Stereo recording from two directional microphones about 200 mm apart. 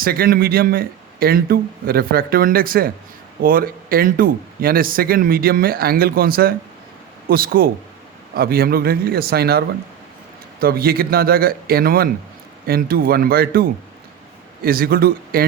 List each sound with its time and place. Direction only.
0.0 s speech: 45° right (ahead or behind)